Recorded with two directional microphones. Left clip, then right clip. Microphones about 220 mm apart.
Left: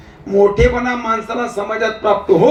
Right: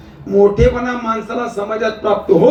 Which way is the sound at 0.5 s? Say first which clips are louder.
Even; 20° left (ahead or behind).